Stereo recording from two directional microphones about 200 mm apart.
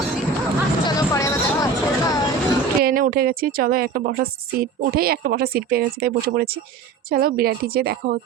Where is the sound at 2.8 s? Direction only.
45° right (ahead or behind).